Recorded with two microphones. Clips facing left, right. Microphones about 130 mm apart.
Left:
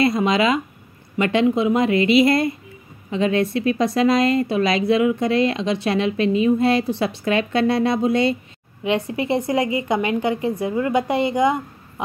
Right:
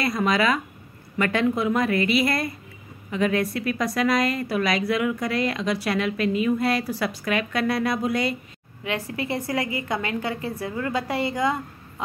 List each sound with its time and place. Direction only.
0.0 s speech: 25° left (ahead or behind)